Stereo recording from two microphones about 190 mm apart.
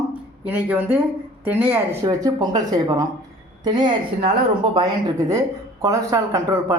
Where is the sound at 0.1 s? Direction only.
10° right (ahead or behind).